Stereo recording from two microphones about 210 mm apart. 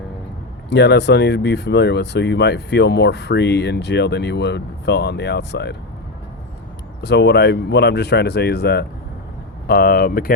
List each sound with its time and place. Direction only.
0.7 s speech: 55° left (ahead or behind)
7.0 s speech: 50° left (ahead or behind)